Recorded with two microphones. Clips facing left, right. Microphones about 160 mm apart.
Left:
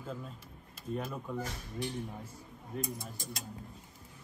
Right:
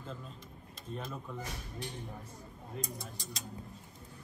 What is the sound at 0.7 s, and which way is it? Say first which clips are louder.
Speech: left 4 dB; 5° left (ahead or behind).